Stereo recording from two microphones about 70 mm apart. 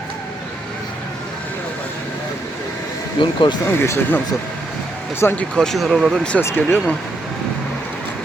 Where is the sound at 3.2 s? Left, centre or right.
Left.